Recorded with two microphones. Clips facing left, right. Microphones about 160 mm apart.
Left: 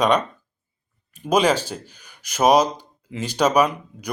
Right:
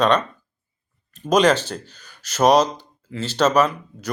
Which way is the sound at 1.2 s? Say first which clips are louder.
Right 2 dB; 10° left (ahead or behind).